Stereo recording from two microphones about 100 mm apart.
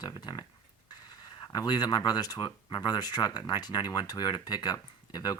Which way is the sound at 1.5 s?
40° left (ahead or behind).